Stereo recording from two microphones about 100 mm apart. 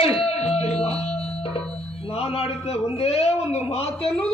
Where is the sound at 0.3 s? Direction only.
90° left.